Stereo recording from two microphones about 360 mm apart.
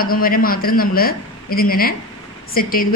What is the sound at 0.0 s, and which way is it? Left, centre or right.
A woman's voice, left.